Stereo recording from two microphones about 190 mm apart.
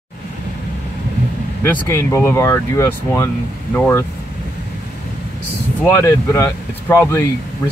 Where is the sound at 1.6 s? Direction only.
15° left (ahead or behind).